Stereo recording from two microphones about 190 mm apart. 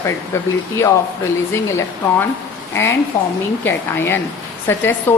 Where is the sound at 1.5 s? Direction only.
10° left (ahead or behind).